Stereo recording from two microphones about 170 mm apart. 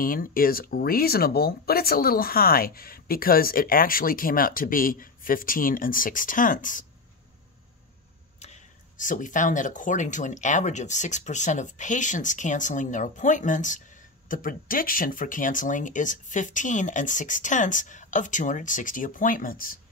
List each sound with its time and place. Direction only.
0.0 s speech: 55° left (ahead or behind)
8.4 s speech: 45° left (ahead or behind)